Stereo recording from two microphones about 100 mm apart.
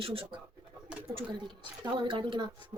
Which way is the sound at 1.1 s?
55° right (ahead or behind).